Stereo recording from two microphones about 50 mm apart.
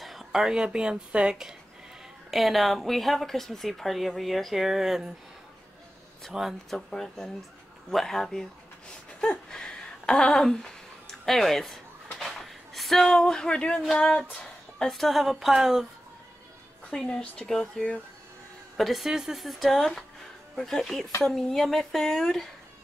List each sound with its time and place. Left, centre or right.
0.0 s speech: centre
2.3 s speech: centre
6.3 s speech: centre
6.7 s speech: centre
9.2 s a sound: centre
13.0 s speech: centre
13.9 s music: centre
14.9 s speech: centre
16.9 s speech: centre
18.8 s speech: centre